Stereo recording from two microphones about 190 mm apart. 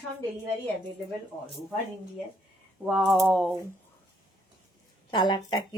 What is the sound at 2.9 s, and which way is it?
Typing, 10° right (ahead or behind).